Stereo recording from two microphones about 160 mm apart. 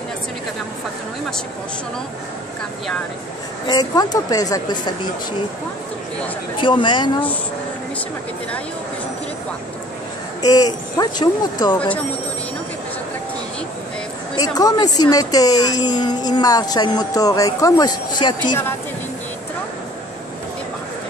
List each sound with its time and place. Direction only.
3.6 s a woman's voice: 25° left (ahead or behind)
6.6 s speech: 30° left (ahead or behind)
10.4 s a woman's voice: 25° left (ahead or behind)
14.3 s a woman's voice: 25° left (ahead or behind)